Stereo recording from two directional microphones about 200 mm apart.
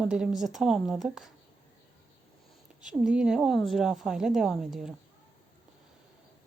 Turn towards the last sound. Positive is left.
turn(degrees=0)  # may be behind; listen again after turning